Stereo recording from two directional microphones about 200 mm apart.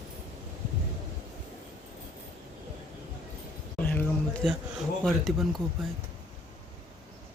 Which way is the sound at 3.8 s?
10° left (ahead or behind).